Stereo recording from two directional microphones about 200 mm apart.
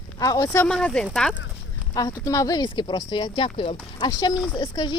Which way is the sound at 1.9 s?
20° left (ahead or behind).